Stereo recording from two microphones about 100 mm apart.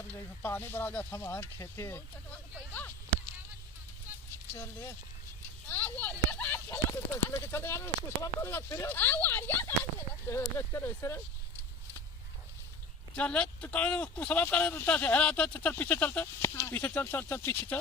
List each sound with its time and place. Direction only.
0.1 s speech: 20° left (ahead or behind)
4.5 s speech: 30° left (ahead or behind)
5.6 s speech: 20° left (ahead or behind)
13.1 s speech: 10° left (ahead or behind)